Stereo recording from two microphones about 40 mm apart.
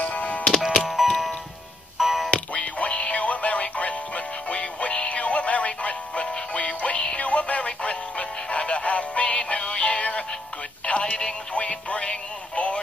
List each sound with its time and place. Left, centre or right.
0.0 s music: left
0.8 s music: centre
2.3 s music: left